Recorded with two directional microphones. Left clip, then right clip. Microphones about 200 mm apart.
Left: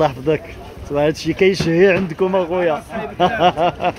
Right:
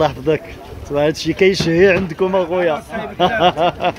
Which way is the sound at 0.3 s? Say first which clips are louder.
Right 1 dB; centre (ahead or behind).